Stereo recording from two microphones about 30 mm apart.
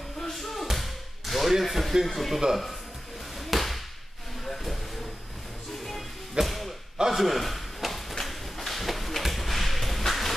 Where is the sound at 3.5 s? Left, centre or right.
Centre.